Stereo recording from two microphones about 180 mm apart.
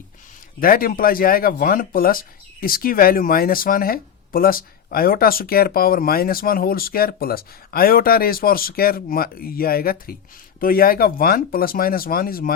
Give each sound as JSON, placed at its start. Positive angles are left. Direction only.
{"t": 0.6, "sound": "speech", "side_deg": 50}